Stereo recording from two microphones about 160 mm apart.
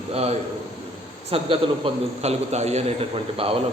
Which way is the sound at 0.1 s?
40° right (ahead or behind).